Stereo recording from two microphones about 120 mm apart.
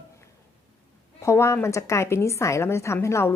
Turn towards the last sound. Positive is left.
turn(degrees=25)  # may be behind; listen again after turning